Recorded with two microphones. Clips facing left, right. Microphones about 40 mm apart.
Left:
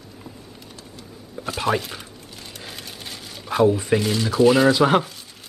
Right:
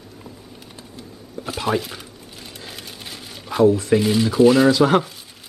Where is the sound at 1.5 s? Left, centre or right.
Centre.